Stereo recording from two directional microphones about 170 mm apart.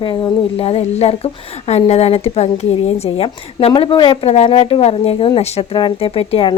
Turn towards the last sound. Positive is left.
turn(degrees=35)  # may be behind; listen again after turning